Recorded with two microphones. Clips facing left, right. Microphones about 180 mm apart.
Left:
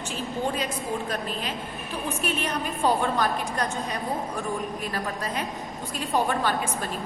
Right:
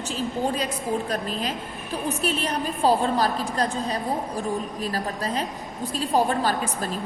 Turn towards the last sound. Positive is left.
turn(degrees=-35)  # may be behind; listen again after turning